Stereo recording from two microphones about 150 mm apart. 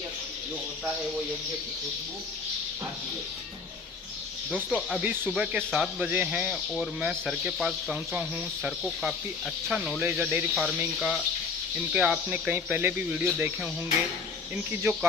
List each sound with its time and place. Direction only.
4.5 s speech: 5° right (ahead or behind)